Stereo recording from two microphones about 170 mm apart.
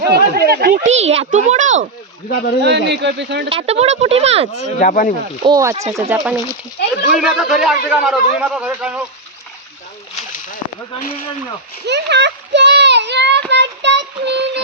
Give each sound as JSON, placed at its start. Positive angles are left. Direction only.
{"t": 0.0, "sound": "speech", "side_deg": -70}
{"t": 0.9, "sound": "a child's voice", "side_deg": -40}
{"t": 2.3, "sound": "speech", "side_deg": 70}
{"t": 2.6, "sound": "speech", "side_deg": -90}
{"t": 3.5, "sound": "speech", "side_deg": -35}
{"t": 4.8, "sound": "speech", "side_deg": 50}
{"t": 5.4, "sound": "speech", "side_deg": -25}
{"t": 7.1, "sound": "a man's voice", "side_deg": 0}
{"t": 11.9, "sound": "a child's voice", "side_deg": -90}
{"t": 13.5, "sound": "child singing", "side_deg": -90}